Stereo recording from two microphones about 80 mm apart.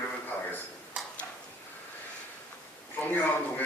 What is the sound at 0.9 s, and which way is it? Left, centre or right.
Tick-tock, centre.